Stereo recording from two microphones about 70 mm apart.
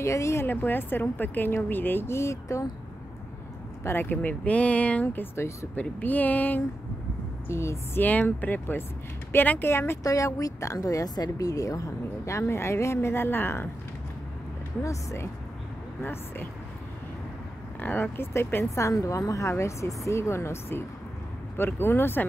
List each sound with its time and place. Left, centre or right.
0.0 s a woman's voice: left
0.5 s a woman's voice: left
3.8 s a woman's voice: left
5.0 s speech: left
5.8 s a woman's voice: left
7.4 s speech: left
8.0 s a woman's voice: left
10.0 s a woman's voice: left
14.8 s a woman's voice: left
16.0 s speech: left
17.7 s speech: left
18.9 s a woman's voice: left